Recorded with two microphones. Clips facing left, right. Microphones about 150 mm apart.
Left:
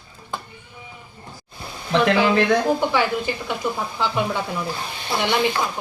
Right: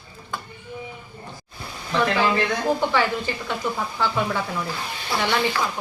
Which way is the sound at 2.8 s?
10° left (ahead or behind).